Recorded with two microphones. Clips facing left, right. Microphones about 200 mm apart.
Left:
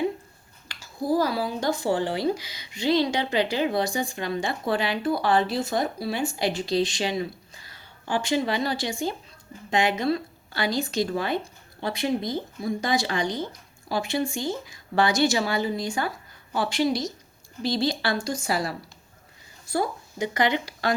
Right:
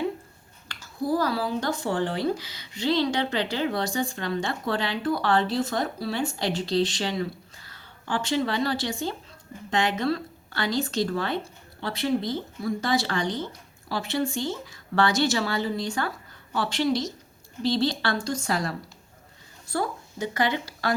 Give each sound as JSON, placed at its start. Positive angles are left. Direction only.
{"t": 0.7, "sound": "speech", "side_deg": 10}